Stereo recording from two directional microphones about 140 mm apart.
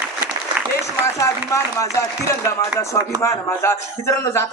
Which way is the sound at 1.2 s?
20° left (ahead or behind).